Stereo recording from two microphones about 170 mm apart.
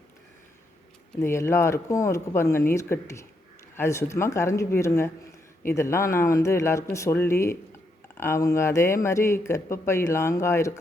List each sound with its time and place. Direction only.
1.2 s speech: 15° left (ahead or behind)